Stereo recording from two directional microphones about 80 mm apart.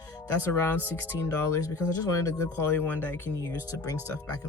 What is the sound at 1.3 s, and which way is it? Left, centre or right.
Speech, left.